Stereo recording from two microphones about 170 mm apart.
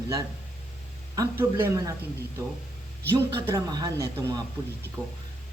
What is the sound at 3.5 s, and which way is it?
Speech, 25° right (ahead or behind).